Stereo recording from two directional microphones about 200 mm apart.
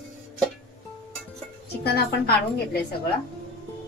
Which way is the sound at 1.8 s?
55° left (ahead or behind).